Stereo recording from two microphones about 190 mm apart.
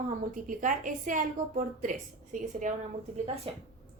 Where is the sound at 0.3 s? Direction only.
45° right (ahead or behind).